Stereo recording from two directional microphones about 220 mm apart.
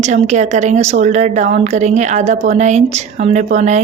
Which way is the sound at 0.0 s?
30° right (ahead or behind).